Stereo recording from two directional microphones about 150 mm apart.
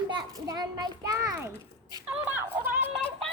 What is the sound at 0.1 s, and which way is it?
A child's voice, 25° right (ahead or behind).